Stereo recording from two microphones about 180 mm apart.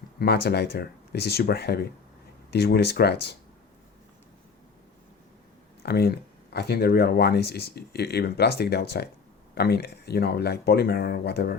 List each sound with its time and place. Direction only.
0.2 s speech: 60° left (ahead or behind)
5.8 s speech: 60° left (ahead or behind)